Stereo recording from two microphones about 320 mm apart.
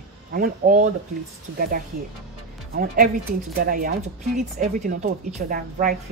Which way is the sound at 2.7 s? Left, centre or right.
Right.